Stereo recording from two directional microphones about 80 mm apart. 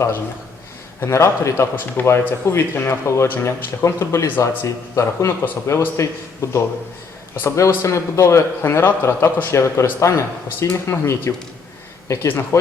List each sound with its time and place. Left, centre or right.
1.0 s speech: left